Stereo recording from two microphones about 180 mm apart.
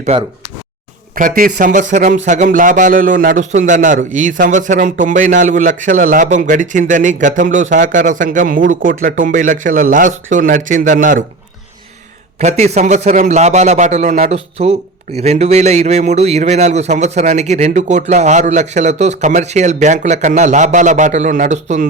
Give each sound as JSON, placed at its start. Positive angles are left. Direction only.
{"t": 1.1, "sound": "a man's voice", "side_deg": -50}
{"t": 12.4, "sound": "a man's voice", "side_deg": -40}